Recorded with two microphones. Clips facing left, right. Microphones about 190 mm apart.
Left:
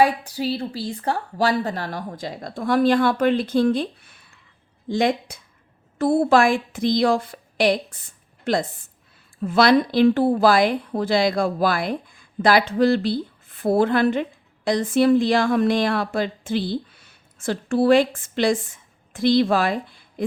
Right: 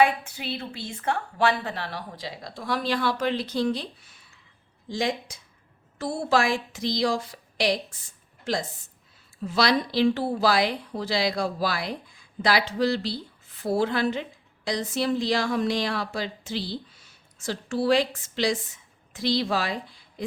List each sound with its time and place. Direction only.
0.0 s a woman's voice: 35° left (ahead or behind); by 20.2 s 55° left (ahead or behind)